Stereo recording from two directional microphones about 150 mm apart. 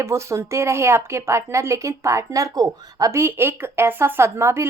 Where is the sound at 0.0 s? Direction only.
20° right (ahead or behind).